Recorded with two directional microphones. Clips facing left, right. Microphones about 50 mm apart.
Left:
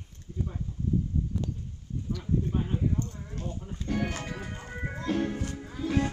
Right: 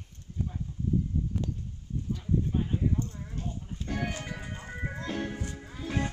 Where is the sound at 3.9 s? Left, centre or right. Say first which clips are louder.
Left 4 dB; centre.